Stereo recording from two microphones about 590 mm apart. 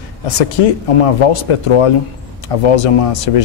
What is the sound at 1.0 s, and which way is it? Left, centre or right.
Speech, left.